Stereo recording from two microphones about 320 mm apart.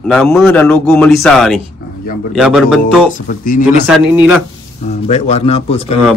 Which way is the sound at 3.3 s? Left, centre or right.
Left.